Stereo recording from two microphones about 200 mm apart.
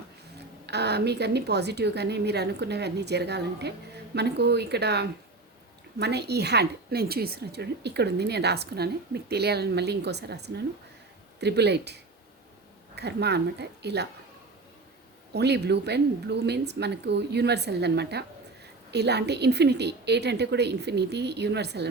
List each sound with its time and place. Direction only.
0.7 s a woman's voice: 55° right (ahead or behind)
13.0 s a woman's voice: 55° right (ahead or behind)
15.3 s a woman's voice: 55° right (ahead or behind)